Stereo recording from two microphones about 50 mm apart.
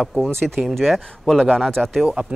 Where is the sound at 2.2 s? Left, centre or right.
Right.